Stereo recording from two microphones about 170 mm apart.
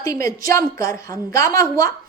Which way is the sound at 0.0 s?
20° left (ahead or behind).